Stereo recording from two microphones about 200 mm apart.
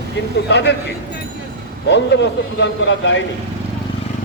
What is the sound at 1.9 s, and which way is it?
Speech, 60° left (ahead or behind).